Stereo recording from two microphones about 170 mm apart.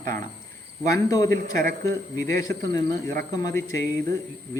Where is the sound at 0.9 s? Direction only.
20° left (ahead or behind).